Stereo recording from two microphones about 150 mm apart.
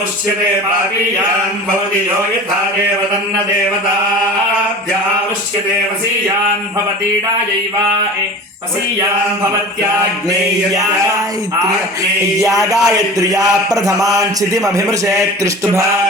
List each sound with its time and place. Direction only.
12.5 s a man's voice: 20° right (ahead or behind)